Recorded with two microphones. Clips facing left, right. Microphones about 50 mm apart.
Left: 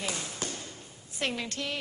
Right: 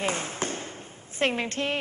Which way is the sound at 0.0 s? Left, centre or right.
Right.